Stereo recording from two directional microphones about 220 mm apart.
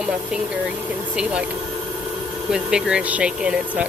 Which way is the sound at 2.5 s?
5° right (ahead or behind).